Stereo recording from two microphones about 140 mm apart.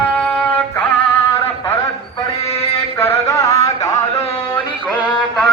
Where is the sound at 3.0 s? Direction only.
20° left (ahead or behind).